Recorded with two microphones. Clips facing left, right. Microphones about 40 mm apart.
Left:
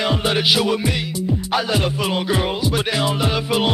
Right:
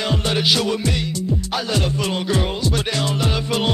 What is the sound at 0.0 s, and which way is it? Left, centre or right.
Music, centre.